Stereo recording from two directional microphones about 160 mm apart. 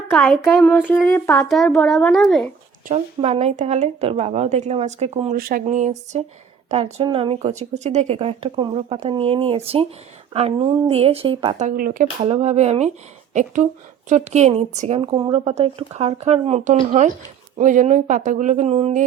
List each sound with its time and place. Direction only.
0.1 s speech: 5° left (ahead or behind)
1.5 s speech: centre (ahead or behind)
2.8 s speech: 45° right (ahead or behind)
5.3 s speech: 65° right (ahead or behind)
5.6 s a woman's voice: 45° right (ahead or behind)
11.6 s speech: 55° right (ahead or behind)
12.2 s a woman's voice: 40° right (ahead or behind)